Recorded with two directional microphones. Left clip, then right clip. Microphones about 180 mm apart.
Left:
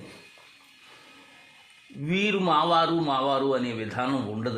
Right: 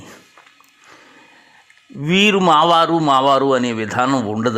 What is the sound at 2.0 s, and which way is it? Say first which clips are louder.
A man's voice: right 12 dB; 45° right (ahead or behind).